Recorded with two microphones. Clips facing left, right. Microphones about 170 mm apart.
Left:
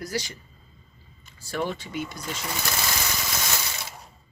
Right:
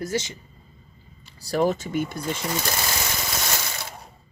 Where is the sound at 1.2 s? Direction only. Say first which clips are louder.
Right 7 dB; 35° right (ahead or behind).